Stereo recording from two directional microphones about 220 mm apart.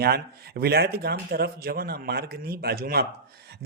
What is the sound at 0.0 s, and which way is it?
Speech, 45° right (ahead or behind).